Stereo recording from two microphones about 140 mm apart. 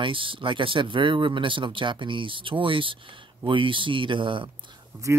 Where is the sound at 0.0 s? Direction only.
40° right (ahead or behind).